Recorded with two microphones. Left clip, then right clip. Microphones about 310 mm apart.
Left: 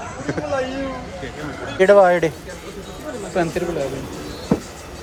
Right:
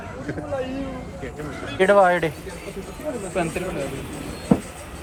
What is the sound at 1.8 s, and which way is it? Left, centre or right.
Speech, centre.